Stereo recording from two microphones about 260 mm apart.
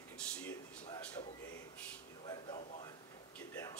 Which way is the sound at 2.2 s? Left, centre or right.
Centre.